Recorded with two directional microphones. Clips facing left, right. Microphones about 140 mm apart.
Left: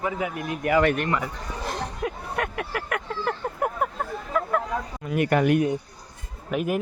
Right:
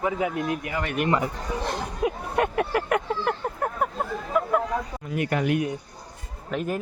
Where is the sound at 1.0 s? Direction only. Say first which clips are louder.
Right 3 dB; 20° right (ahead or behind).